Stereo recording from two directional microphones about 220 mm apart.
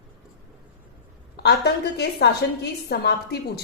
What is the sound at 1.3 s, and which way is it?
A woman's voice, 50° left (ahead or behind).